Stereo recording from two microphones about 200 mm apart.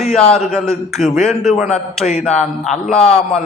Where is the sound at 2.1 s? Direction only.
30° left (ahead or behind).